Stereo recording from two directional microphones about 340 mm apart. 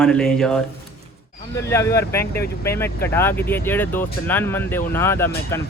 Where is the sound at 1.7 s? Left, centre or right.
Centre.